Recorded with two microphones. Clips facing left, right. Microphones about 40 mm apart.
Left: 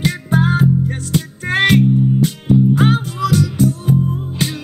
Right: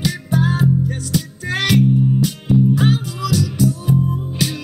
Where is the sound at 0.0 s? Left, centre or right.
Left.